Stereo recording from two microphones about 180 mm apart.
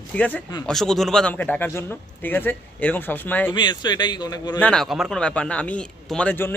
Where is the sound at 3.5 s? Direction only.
25° left (ahead or behind).